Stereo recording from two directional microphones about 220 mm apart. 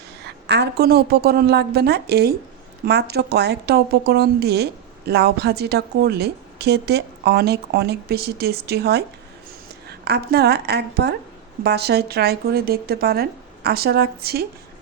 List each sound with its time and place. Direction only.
0.4 s a woman's voice: 50° right (ahead or behind)